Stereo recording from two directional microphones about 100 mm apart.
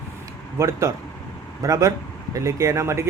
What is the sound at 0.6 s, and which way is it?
Speech, 35° right (ahead or behind).